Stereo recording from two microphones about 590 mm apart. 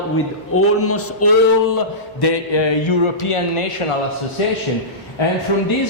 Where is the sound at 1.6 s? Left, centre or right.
Left.